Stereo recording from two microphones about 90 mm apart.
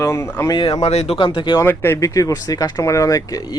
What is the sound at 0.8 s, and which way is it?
Speech, 90° left.